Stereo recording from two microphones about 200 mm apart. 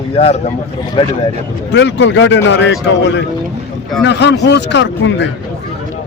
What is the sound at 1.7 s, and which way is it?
Speech, 60° left (ahead or behind).